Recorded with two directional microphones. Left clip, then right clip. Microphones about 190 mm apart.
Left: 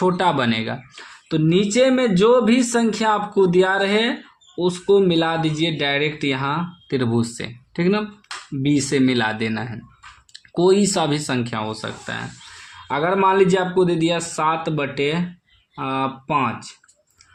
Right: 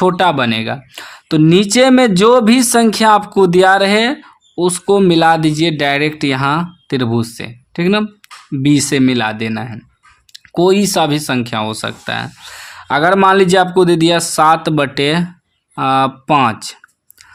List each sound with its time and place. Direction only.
0.0 s speech: 40° right (ahead or behind)